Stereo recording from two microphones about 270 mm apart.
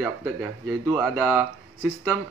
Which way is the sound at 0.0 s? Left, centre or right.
Centre.